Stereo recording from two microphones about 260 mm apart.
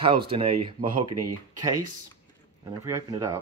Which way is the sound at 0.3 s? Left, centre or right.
Right.